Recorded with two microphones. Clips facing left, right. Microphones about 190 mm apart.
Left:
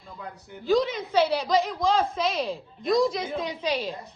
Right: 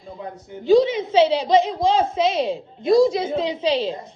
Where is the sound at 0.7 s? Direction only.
25° right (ahead or behind).